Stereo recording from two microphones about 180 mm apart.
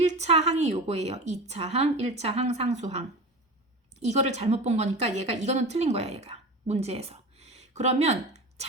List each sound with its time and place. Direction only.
0.0 s a woman's voice: 40° right (ahead or behind)